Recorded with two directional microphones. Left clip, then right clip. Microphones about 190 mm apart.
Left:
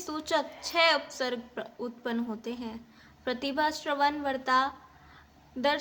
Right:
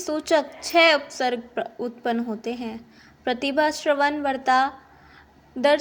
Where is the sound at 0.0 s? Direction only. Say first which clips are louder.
Right 8 dB; 15° right (ahead or behind).